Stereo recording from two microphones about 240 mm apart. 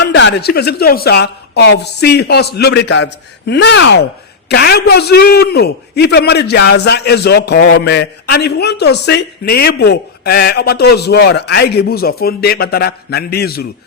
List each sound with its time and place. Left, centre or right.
0.0 s a man's voice: left